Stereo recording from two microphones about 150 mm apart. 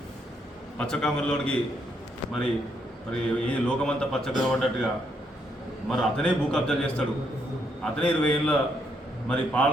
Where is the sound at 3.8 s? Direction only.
5° left (ahead or behind).